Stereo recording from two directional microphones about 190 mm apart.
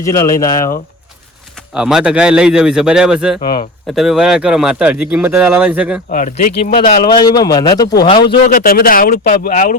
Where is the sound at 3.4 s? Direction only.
45° left (ahead or behind).